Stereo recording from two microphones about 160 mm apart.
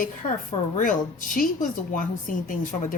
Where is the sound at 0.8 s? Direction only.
55° left (ahead or behind).